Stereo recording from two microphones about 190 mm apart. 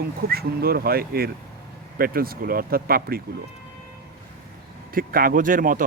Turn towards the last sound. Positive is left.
turn(degrees=-45)  # may be behind; listen again after turning